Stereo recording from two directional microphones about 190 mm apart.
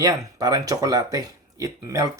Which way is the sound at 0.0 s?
20° right (ahead or behind).